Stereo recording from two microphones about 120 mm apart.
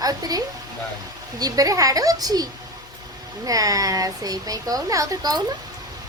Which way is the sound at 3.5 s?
30° right (ahead or behind).